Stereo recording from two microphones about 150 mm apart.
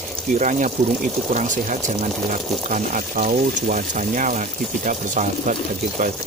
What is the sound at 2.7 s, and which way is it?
Speech, 55° right (ahead or behind).